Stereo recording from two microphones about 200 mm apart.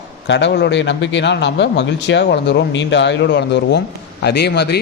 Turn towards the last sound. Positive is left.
turn(degrees=55)  # may be behind; listen again after turning